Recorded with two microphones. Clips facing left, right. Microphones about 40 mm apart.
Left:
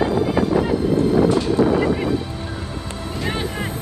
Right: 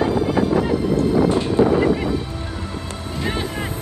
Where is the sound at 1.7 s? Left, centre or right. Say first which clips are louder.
Right 1 dB; centre.